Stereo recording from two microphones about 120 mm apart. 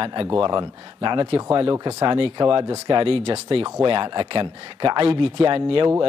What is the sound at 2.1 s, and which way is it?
Speech, 45° right (ahead or behind).